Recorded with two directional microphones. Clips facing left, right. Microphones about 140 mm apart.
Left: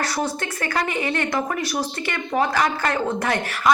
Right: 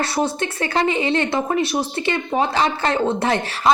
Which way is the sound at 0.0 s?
25° right (ahead or behind).